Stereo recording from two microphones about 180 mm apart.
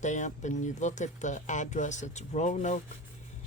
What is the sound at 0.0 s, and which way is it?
Speech, 40° left (ahead or behind).